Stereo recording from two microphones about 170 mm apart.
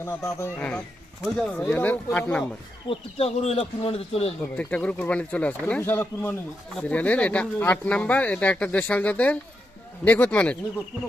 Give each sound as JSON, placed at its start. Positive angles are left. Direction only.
{"t": 0.0, "sound": "speech", "side_deg": 15}
{"t": 2.9, "sound": "speech", "side_deg": 35}
{"t": 4.5, "sound": "speech", "side_deg": 10}